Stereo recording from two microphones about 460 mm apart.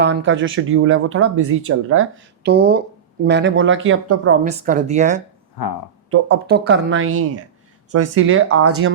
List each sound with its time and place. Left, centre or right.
0.0 s speech: right
4.4 s speech: centre
6.1 s speech: right